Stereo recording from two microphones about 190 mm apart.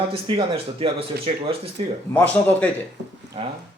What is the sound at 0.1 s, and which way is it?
Speech, 30° right (ahead or behind).